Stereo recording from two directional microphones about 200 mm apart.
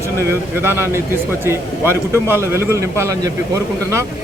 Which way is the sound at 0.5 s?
10° right (ahead or behind).